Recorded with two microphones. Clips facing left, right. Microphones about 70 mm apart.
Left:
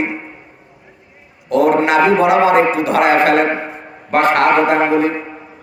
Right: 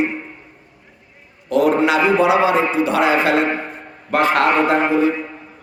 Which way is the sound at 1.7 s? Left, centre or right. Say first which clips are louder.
Left 3 dB; left.